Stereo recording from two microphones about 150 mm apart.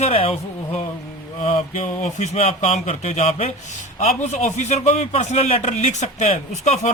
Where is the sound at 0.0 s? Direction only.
45° left (ahead or behind).